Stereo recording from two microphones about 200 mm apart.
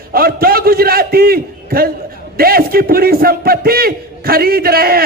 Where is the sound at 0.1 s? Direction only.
50° right (ahead or behind).